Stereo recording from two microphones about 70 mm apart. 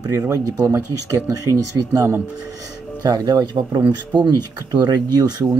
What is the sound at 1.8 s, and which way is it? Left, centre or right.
Speech, right.